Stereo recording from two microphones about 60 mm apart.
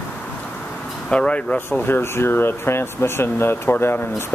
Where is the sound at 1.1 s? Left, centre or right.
Centre.